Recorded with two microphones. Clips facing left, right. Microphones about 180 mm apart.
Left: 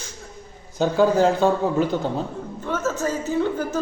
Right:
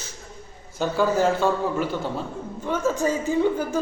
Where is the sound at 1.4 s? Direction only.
20° left (ahead or behind).